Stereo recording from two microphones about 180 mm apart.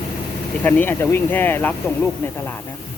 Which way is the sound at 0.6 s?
10° left (ahead or behind).